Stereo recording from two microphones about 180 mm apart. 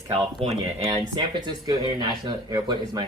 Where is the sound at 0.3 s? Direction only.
30° right (ahead or behind).